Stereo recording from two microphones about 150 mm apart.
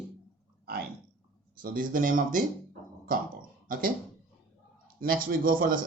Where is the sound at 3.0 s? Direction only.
70° right (ahead or behind).